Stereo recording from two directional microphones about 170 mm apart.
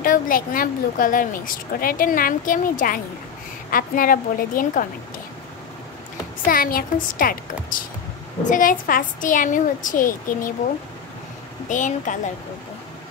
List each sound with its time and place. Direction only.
0.0 s a woman's voice: 55° left (ahead or behind)
6.5 s a woman's voice: 55° left (ahead or behind)
11.7 s a woman's voice: 50° left (ahead or behind)